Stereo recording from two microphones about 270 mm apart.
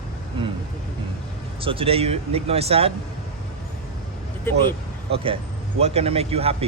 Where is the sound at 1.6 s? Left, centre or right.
Centre.